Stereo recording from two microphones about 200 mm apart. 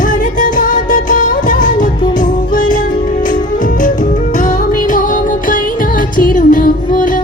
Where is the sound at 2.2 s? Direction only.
40° left (ahead or behind).